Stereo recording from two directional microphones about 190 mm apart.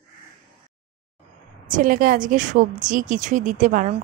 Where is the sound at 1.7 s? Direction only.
45° right (ahead or behind).